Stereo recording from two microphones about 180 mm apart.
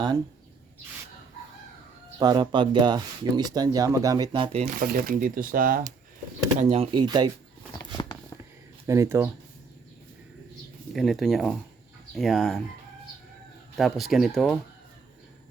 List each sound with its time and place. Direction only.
2.1 s speech: 25° right (ahead or behind)
4.6 s speech: 55° right (ahead or behind)
6.6 s speech: 35° right (ahead or behind)
7.8 s a sound: 25° left (ahead or behind)
8.9 s speech: 15° right (ahead or behind)
10.9 s speech: centre (ahead or behind)
13.7 s speech: centre (ahead or behind)